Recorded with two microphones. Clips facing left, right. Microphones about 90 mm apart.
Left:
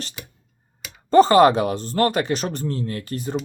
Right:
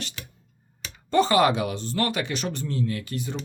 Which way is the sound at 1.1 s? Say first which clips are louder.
Left 7 dB; 40° left (ahead or behind).